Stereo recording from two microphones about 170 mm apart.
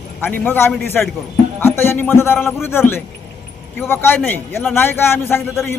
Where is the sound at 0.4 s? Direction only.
10° left (ahead or behind).